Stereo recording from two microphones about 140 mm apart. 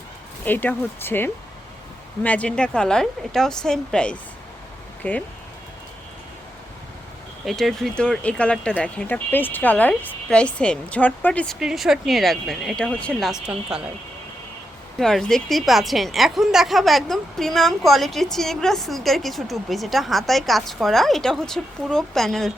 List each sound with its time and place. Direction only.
0.4 s a woman's voice: 15° left (ahead or behind)
7.4 s speech: centre (ahead or behind)
11.6 s a woman's voice: centre (ahead or behind)
14.9 s a woman's voice: 5° left (ahead or behind)